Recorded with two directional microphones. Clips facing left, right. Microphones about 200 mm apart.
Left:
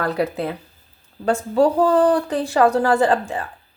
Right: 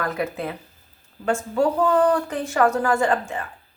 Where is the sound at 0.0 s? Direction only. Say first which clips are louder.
Left 4 dB; 35° left (ahead or behind).